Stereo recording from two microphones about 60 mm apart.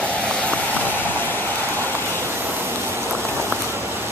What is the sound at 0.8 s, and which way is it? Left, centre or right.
Vehicle, left.